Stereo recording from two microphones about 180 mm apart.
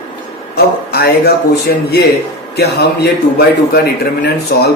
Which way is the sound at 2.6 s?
65° left (ahead or behind).